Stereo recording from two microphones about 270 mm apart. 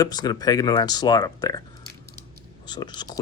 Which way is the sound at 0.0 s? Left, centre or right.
Centre.